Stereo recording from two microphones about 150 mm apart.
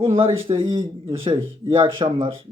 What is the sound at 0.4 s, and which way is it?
Speech, 35° right (ahead or behind).